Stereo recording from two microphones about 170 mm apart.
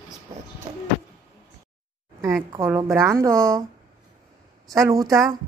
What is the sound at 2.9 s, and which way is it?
Speech, 15° right (ahead or behind).